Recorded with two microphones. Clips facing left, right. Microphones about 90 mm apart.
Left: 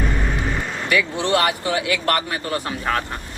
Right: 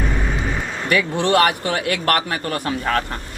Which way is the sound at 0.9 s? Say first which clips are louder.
Right 2 dB; 50° right (ahead or behind).